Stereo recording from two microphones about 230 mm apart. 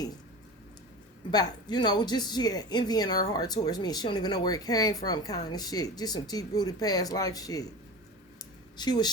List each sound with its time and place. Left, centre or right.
1.3 s speech: centre
8.8 s speech: centre